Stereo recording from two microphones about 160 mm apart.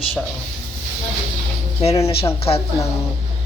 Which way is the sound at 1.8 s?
40° left (ahead or behind).